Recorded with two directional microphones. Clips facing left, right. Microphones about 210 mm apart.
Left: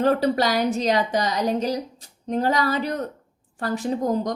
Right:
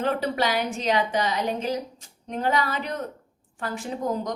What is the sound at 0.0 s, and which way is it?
A woman's voice, 40° left (ahead or behind).